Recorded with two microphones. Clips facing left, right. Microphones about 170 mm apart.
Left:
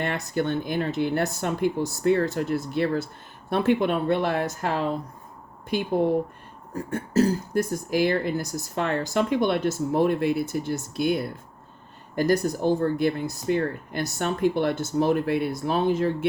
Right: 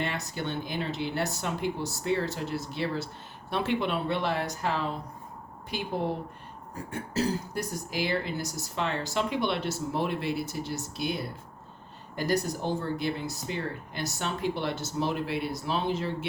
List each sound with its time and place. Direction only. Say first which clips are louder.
0.0 s speech: left 6 dB; 50° left (ahead or behind)
6.9 s speech: left 7 dB; 45° left (ahead or behind)